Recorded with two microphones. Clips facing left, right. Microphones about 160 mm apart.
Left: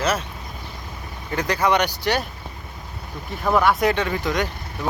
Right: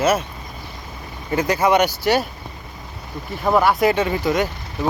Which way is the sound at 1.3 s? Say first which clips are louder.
Right 4 dB; 5° right (ahead or behind).